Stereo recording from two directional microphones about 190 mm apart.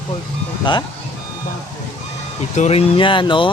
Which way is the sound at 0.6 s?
25° left (ahead or behind).